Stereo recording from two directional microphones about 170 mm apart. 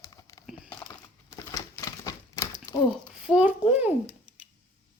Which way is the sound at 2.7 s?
20° left (ahead or behind).